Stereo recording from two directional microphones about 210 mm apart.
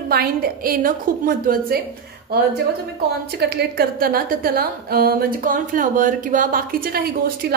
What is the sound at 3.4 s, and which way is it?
A woman's voice, 50° right (ahead or behind).